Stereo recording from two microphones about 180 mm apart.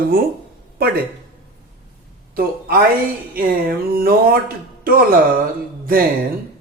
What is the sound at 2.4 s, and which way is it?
Speech, 55° right (ahead or behind).